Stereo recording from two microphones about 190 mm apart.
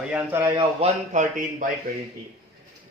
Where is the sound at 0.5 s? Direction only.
35° right (ahead or behind).